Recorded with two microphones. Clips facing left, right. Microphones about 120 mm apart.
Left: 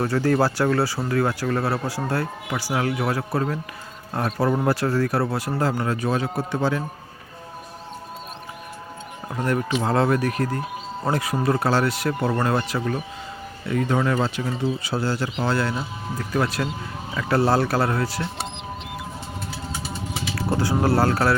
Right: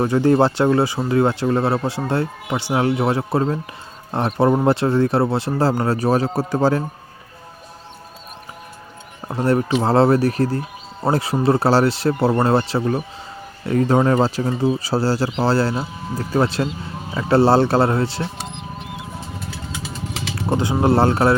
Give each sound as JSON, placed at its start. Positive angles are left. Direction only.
{"t": 0.0, "sound": "speech", "side_deg": -20}
{"t": 9.3, "sound": "speech", "side_deg": -30}
{"t": 19.8, "sound": "vehicle", "side_deg": -90}
{"t": 20.3, "sound": "speech", "side_deg": -20}